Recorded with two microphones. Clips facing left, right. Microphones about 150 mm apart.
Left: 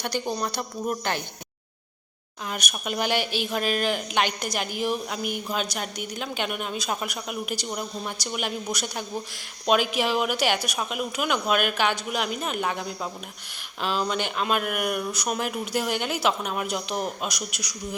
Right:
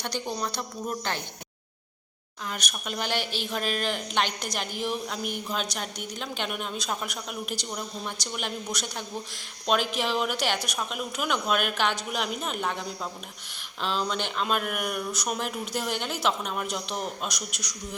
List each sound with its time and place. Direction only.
0.3 s speech: 5° left (ahead or behind)
2.5 s speech: 10° left (ahead or behind)